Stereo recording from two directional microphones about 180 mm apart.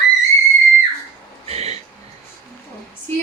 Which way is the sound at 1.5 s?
35° right (ahead or behind).